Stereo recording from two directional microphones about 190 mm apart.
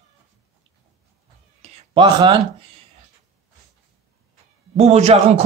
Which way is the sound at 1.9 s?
25° right (ahead or behind).